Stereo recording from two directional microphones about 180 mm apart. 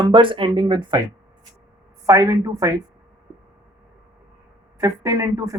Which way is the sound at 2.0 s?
15° right (ahead or behind).